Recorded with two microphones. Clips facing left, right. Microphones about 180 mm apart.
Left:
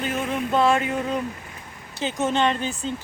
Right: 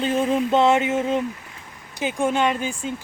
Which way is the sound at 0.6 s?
20° right (ahead or behind).